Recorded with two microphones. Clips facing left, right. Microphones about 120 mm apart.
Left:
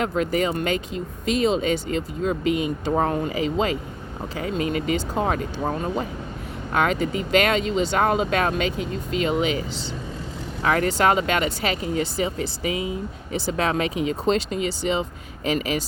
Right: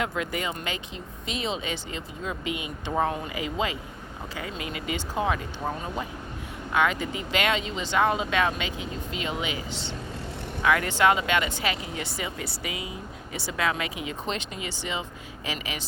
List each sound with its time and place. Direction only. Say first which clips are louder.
0.0 s speech: left 7 dB; 40° left (ahead or behind)
6.7 s speech: left 3 dB; 45° left (ahead or behind)
10.6 s speech: left 2 dB; 40° left (ahead or behind)